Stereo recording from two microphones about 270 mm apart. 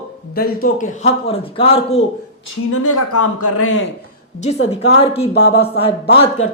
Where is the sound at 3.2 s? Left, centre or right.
Left.